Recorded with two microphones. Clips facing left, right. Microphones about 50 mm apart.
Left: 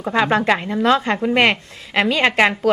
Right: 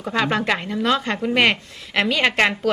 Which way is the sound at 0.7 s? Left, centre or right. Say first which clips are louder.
Left 4 dB; left.